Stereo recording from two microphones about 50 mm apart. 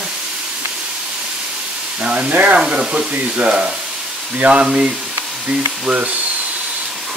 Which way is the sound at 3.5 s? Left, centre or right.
Centre.